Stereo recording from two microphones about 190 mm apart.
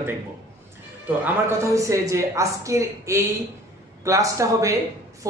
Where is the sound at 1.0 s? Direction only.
10° right (ahead or behind).